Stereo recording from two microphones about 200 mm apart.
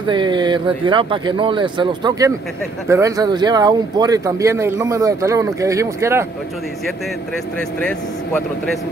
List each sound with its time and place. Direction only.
0.0 s speech: 25° right (ahead or behind)